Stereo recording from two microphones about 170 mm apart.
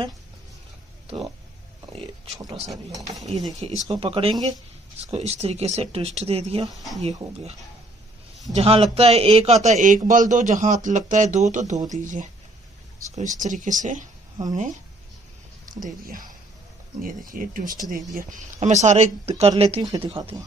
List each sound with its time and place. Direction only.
1.9 s speech: 35° right (ahead or behind)
3.9 s speech: 35° right (ahead or behind)
5.1 s speech: 35° right (ahead or behind)
8.5 s speech: 35° right (ahead or behind)
15.8 s speech: 55° right (ahead or behind)
18.1 s speech: 45° right (ahead or behind)